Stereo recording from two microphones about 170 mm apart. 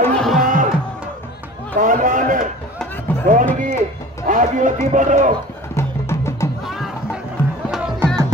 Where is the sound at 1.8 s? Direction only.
50° right (ahead or behind).